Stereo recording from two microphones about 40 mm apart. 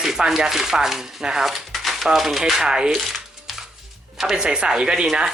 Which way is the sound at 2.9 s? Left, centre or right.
Centre.